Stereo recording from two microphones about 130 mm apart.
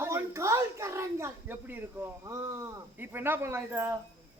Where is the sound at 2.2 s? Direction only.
20° right (ahead or behind).